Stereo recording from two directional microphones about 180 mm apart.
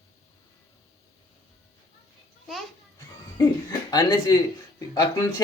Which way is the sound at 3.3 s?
20° left (ahead or behind).